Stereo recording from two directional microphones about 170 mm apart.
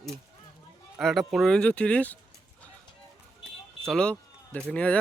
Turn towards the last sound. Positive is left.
turn(degrees=5)  # may be behind; listen again after turning